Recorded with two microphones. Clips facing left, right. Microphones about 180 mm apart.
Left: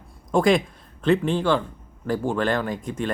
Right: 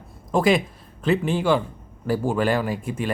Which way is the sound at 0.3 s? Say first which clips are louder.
Even; 5° right (ahead or behind).